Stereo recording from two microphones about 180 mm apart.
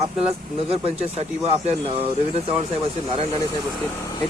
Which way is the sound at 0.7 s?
35° right (ahead or behind).